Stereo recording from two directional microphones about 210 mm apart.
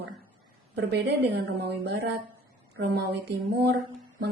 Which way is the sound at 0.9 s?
55° right (ahead or behind).